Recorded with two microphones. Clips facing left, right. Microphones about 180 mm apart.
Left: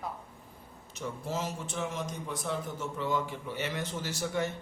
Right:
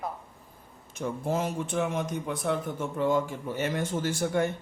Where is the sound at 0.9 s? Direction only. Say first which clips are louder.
Right 6 dB; 55° right (ahead or behind).